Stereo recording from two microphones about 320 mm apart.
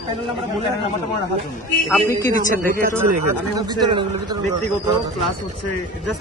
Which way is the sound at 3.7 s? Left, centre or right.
Centre.